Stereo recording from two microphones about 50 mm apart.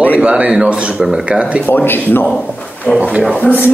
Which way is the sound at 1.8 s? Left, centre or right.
Left.